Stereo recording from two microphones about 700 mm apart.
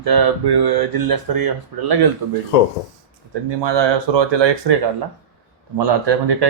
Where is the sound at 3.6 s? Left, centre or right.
Right.